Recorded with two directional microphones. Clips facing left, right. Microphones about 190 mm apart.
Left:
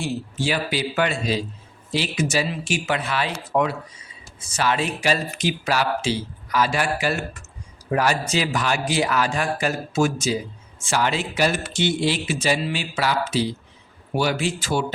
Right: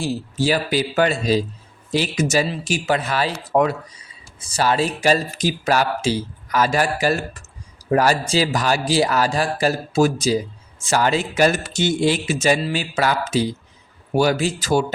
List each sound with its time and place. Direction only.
0.0 s speech: 35° right (ahead or behind)